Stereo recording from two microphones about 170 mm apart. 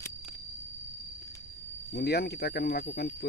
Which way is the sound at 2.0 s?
70° left (ahead or behind).